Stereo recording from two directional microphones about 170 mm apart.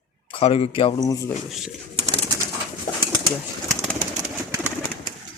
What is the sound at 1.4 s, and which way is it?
Speech, centre (ahead or behind).